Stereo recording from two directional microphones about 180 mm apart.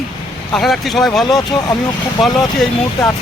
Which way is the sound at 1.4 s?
25° left (ahead or behind).